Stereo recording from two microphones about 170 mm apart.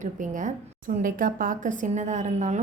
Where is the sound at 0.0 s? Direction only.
50° right (ahead or behind).